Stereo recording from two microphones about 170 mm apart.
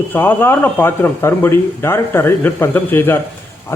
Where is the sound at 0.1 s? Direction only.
10° left (ahead or behind).